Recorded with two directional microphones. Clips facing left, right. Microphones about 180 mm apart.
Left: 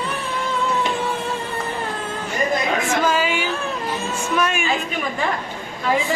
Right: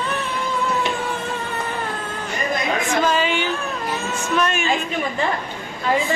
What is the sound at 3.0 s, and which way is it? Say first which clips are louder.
A woman's voice: even; 5° left (ahead or behind).